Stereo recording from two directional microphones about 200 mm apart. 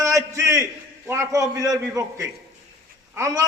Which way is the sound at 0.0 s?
15° right (ahead or behind).